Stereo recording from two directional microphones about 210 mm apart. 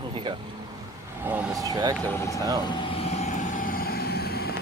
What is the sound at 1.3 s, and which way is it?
Speech, 10° right (ahead or behind).